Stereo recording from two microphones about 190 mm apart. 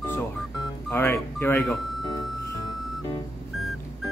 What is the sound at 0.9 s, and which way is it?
Speech, 10° left (ahead or behind).